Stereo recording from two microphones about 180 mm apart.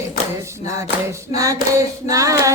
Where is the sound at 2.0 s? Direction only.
15° right (ahead or behind).